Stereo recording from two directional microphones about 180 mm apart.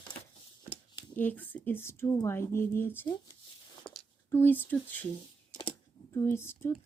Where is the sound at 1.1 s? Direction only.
10° left (ahead or behind).